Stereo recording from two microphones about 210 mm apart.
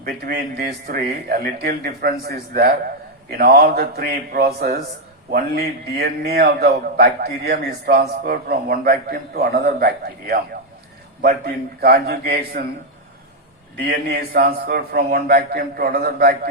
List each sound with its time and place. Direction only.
0.0 s a man's voice: 50° right (ahead or behind)
13.8 s a man's voice: 45° right (ahead or behind)